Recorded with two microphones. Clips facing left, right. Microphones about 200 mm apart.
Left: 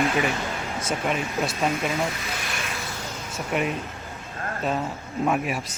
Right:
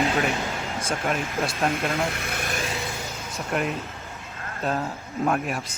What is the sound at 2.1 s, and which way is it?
Speech, 60° right (ahead or behind).